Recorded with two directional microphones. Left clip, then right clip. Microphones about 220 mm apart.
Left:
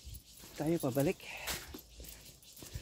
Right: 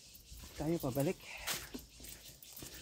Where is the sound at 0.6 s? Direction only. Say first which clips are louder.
Left 3 dB; 50° left (ahead or behind).